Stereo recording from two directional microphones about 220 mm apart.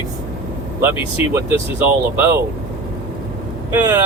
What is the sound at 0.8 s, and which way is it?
Speech, 10° right (ahead or behind).